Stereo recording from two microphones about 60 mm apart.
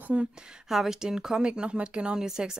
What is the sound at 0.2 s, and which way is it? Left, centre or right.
Speech, centre.